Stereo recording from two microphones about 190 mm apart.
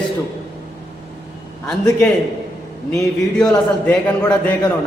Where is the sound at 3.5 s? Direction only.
15° left (ahead or behind).